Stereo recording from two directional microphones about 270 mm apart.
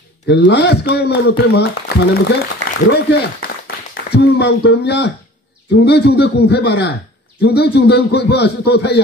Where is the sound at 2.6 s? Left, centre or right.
Right.